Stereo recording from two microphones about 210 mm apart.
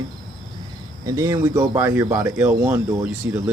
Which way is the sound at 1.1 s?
15° right (ahead or behind).